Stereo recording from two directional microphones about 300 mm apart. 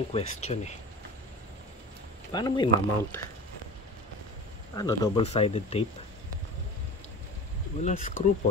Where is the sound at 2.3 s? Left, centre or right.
Centre.